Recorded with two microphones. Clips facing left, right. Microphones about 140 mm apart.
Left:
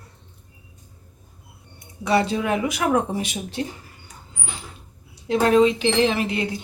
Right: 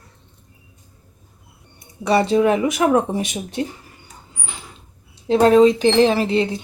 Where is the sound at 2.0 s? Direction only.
25° right (ahead or behind).